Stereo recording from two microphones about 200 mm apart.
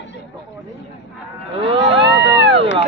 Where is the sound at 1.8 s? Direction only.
60° right (ahead or behind).